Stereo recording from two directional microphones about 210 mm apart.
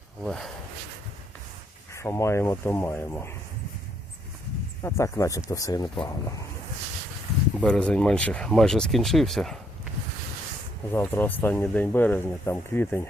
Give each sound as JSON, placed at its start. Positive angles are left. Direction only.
{"t": 0.2, "sound": "speech", "side_deg": 0}
{"t": 1.9, "sound": "speech", "side_deg": 15}
{"t": 4.8, "sound": "speech", "side_deg": 15}
{"t": 7.6, "sound": "speech", "side_deg": 5}
{"t": 10.9, "sound": "speech", "side_deg": 10}